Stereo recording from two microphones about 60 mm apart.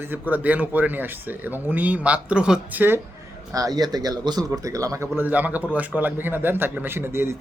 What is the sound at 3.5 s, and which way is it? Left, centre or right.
Speech, right.